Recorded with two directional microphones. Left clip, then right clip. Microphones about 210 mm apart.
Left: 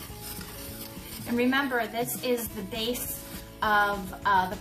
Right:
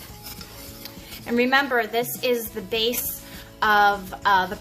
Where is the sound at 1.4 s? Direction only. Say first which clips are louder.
Right 6 dB; 50° right (ahead or behind).